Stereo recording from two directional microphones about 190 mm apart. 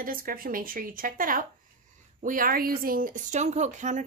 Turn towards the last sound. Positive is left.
turn(degrees=-40)  # may be behind; listen again after turning